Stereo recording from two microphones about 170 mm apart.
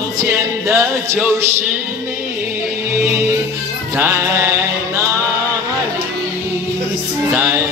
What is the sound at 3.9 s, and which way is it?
Music, 10° right (ahead or behind).